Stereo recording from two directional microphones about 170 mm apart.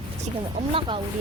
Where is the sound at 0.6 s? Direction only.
30° right (ahead or behind).